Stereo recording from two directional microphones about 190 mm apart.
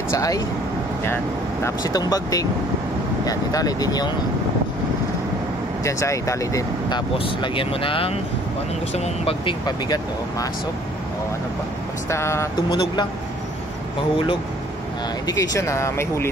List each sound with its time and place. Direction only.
0.1 s speech: 20° left (ahead or behind)
5.9 s speech: 15° left (ahead or behind)
7.2 s speech: 25° left (ahead or behind)
12.1 s speech: 15° left (ahead or behind)
15.2 s speech: 15° left (ahead or behind)